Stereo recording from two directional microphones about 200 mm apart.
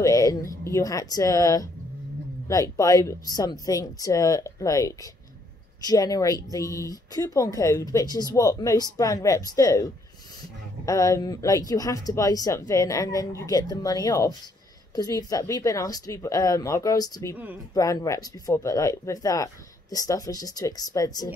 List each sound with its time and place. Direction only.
0.0 s speech: 15° left (ahead or behind)
10.9 s speech: 15° left (ahead or behind)